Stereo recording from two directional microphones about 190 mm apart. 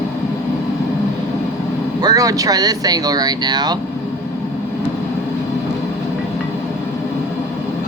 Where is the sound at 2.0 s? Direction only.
20° right (ahead or behind).